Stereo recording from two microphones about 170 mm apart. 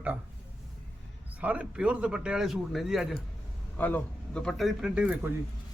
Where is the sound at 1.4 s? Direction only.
10° right (ahead or behind).